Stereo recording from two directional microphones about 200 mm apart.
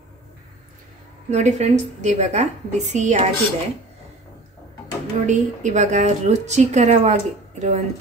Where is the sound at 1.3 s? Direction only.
35° right (ahead or behind).